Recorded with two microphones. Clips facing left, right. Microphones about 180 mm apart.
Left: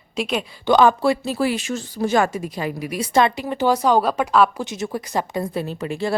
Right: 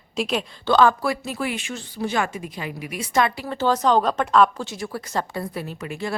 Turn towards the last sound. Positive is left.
turn(degrees=30)  # may be behind; listen again after turning